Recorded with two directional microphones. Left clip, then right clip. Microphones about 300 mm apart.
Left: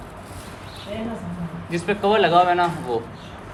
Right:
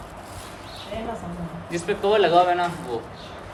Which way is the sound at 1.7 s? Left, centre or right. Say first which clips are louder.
Left 1 dB; centre.